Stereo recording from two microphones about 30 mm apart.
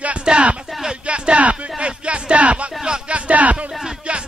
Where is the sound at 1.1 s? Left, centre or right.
Right.